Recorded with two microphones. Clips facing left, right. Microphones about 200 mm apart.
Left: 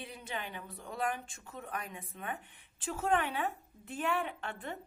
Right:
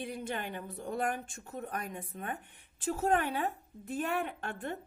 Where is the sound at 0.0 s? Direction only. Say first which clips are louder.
Right 5 dB; 50° right (ahead or behind).